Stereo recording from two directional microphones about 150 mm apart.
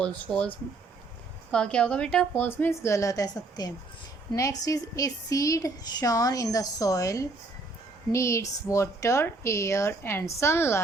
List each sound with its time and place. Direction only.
0.0 s a woman's voice: 5° left (ahead or behind)